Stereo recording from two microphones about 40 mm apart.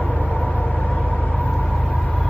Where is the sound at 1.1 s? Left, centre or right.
Left.